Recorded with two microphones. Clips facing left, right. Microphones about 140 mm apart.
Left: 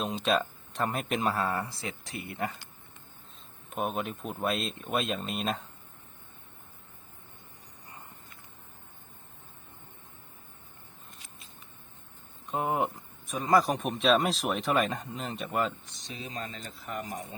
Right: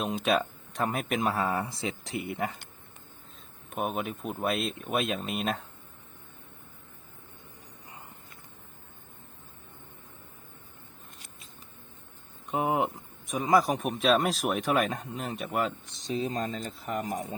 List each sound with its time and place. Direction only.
0.0 s speech: 10° right (ahead or behind)
3.7 s speech: 5° right (ahead or behind)
12.5 s speech: 15° right (ahead or behind)
16.0 s speech: 35° right (ahead or behind)